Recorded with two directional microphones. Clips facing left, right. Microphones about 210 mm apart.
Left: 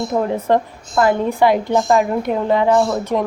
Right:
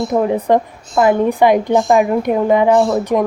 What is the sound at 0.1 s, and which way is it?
A woman's voice, 15° right (ahead or behind).